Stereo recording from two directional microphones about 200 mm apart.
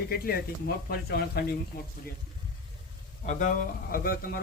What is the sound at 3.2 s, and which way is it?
Speech, 40° left (ahead or behind).